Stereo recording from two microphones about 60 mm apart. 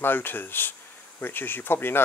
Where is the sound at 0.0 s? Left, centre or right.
Left.